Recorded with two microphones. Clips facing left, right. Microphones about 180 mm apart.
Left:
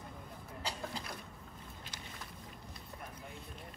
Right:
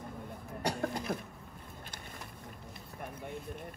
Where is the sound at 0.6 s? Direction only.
65° right (ahead or behind).